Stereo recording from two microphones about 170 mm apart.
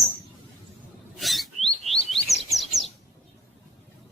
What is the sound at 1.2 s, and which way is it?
Chirp, centre (ahead or behind).